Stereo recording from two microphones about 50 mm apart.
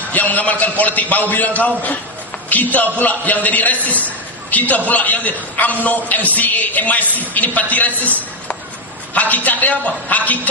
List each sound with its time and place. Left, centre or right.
0.1 s a man's voice: left
9.1 s a man's voice: left